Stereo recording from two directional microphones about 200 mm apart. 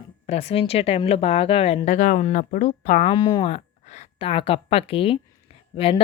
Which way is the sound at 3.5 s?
35° left (ahead or behind).